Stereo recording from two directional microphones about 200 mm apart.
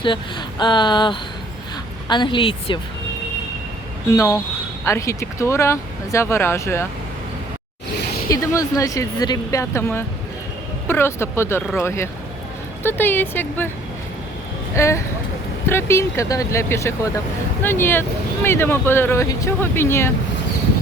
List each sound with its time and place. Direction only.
0.0 s speech: 25° left (ahead or behind)
4.1 s speech: 15° left (ahead or behind)
8.3 s speech: 15° left (ahead or behind)
14.8 s speech: 15° left (ahead or behind)